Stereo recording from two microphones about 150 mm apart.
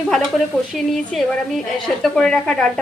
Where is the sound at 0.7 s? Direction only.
Centre (ahead or behind).